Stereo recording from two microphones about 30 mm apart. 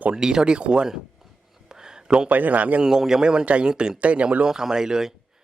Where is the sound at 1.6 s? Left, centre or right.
Right.